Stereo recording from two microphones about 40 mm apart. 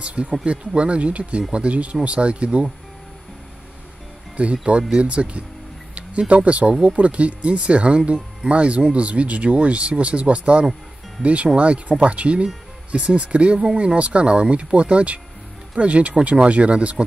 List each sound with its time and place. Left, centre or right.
0.0 s speech: right
4.4 s speech: right